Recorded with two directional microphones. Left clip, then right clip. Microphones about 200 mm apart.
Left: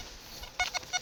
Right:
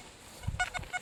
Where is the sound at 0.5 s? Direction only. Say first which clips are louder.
Left 2 dB; 45° left (ahead or behind).